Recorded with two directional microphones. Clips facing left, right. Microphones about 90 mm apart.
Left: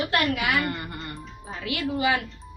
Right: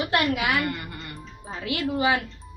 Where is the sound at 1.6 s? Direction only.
30° right (ahead or behind).